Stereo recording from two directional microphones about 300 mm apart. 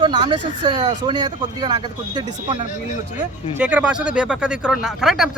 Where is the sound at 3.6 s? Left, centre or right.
Centre.